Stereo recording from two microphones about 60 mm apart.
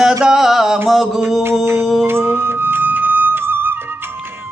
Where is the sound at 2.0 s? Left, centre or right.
Right.